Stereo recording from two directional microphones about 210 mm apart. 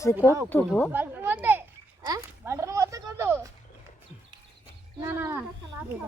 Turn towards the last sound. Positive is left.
turn(degrees=-10)  # may be behind; listen again after turning